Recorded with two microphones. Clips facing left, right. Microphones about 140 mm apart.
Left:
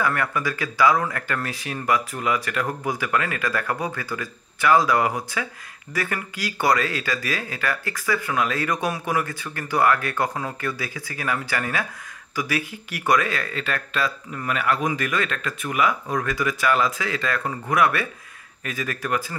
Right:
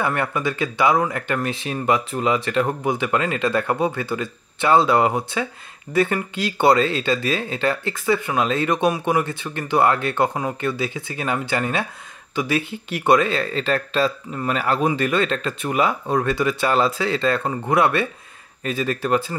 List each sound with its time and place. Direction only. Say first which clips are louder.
0.0 s speech: right 2 dB; 25° right (ahead or behind)